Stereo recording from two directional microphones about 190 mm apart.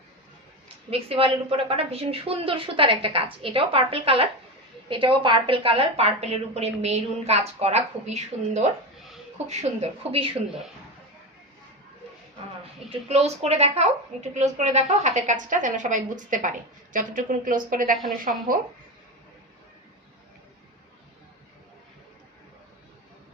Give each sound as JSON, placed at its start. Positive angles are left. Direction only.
{"t": 0.9, "sound": "a woman's voice", "side_deg": -30}
{"t": 12.9, "sound": "a woman's voice", "side_deg": -35}